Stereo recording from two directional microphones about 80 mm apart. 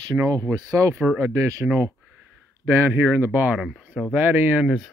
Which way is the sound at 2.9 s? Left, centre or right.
Right.